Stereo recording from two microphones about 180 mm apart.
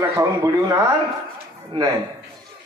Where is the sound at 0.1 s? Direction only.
20° right (ahead or behind).